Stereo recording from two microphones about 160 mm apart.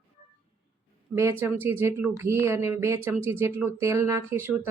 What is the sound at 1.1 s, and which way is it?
Speech, 15° right (ahead or behind).